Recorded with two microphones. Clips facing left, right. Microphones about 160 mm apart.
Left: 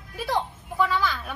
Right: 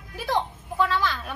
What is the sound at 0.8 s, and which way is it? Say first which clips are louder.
Speech: even; 10° left (ahead or behind).